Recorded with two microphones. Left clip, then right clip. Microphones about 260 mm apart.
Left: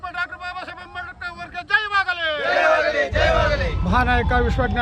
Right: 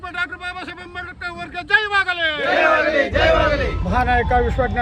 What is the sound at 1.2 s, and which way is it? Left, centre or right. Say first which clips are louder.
Vehicle: right 3 dB; centre.